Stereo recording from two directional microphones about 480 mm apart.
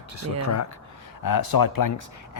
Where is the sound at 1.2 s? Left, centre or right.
Left.